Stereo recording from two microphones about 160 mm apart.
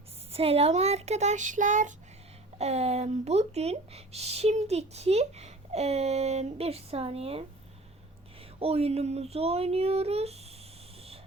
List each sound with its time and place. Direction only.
0.3 s speech: 35° right (ahead or behind)